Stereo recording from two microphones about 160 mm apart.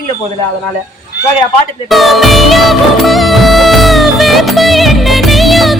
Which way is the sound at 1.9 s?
Centre (ahead or behind).